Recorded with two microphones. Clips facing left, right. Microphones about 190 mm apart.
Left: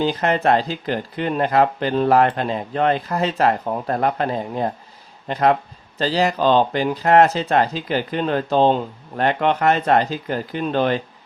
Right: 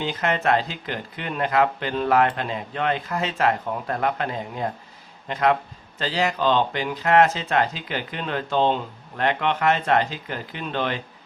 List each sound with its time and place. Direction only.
0.0 s speech: 35° left (ahead or behind)